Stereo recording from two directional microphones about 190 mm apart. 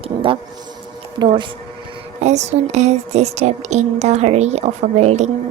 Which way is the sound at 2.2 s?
35° right (ahead or behind).